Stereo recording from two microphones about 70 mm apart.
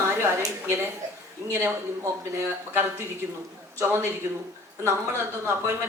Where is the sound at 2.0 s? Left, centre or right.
Right.